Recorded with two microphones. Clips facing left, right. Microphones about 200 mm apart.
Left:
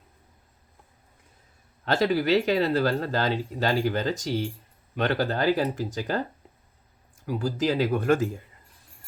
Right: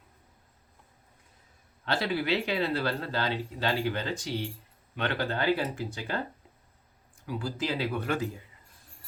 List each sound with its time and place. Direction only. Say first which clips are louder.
1.8 s speech: left 6 dB; 45° left (ahead or behind)
7.3 s speech: left 6 dB; 40° left (ahead or behind)